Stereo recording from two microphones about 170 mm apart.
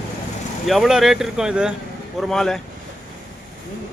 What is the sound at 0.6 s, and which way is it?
Speech, centre (ahead or behind).